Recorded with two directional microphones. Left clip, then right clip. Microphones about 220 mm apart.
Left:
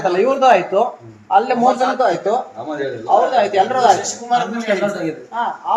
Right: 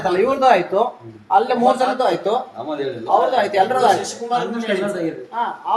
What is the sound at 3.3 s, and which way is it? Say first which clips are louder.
Speech: left 2 dB; 15° left (ahead or behind).